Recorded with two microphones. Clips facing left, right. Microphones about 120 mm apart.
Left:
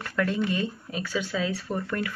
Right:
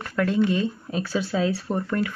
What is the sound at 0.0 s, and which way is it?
Speech, 25° right (ahead or behind).